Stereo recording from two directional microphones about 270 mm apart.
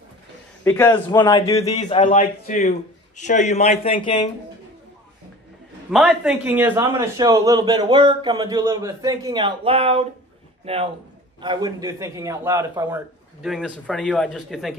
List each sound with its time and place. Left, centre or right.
0.7 s a man's voice: centre
5.9 s a man's voice: centre
13.4 s speech: centre